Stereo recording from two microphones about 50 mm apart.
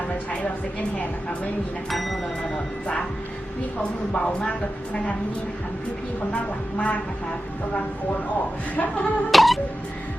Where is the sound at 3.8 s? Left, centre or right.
Centre.